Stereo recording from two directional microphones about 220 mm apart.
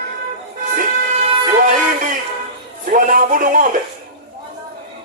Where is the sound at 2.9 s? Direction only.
40° right (ahead or behind).